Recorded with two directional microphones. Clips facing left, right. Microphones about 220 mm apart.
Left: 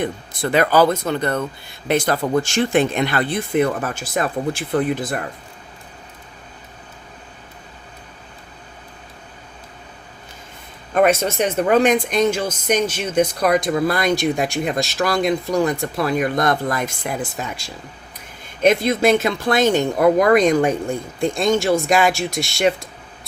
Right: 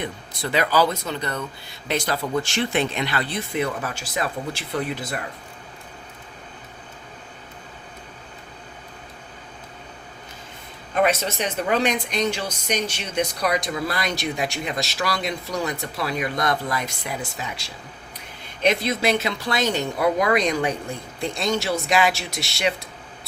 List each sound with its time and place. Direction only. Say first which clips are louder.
0.0 s speech: left 6 dB; 50° left (ahead or behind)
10.9 s speech: left 5 dB; 50° left (ahead or behind)